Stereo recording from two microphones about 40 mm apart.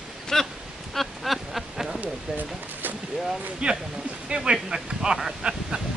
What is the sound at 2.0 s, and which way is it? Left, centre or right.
Speech, right.